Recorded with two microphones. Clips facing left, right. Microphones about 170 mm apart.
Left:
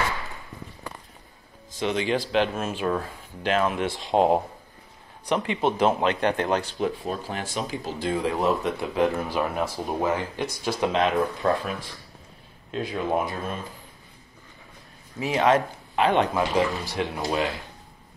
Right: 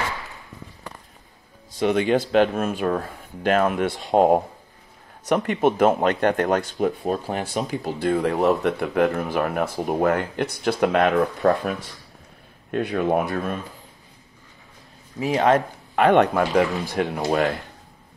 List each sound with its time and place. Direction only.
1.8 s speech: 50° right (ahead or behind)
12.7 s speech: 65° right (ahead or behind)
15.1 s speech: 40° right (ahead or behind)